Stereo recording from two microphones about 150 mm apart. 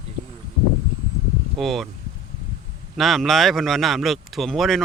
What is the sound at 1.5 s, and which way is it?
Speech, centre (ahead or behind).